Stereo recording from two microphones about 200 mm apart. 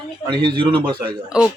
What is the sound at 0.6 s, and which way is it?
Speech, 25° right (ahead or behind).